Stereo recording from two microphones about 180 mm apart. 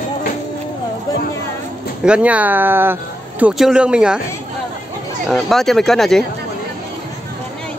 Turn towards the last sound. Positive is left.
turn(degrees=0)  # may be behind; listen again after turning